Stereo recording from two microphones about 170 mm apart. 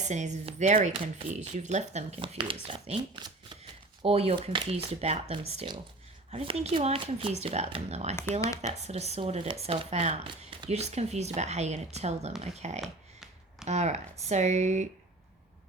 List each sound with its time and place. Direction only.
0.1 s speech: 45° right (ahead or behind); by 4.7 s 25° right (ahead or behind)
4.7 s speech: 40° right (ahead or behind)
8.3 s speech: 20° left (ahead or behind)
8.8 s speech: 40° right (ahead or behind)
12.8 s a sound: centre (ahead or behind)
13.7 s speech: 40° right (ahead or behind)